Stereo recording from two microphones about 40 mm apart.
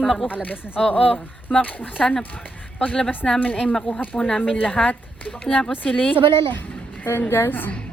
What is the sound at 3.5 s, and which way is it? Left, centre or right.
Speech, left.